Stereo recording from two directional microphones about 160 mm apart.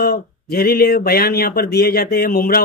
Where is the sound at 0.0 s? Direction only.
70° left (ahead or behind).